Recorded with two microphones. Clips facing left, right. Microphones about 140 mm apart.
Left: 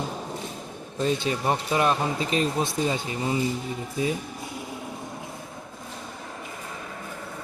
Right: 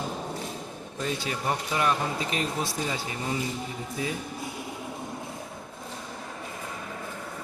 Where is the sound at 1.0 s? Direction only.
25° left (ahead or behind).